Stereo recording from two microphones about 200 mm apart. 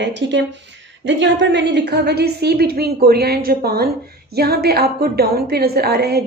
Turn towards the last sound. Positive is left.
turn(degrees=-50)  # may be behind; listen again after turning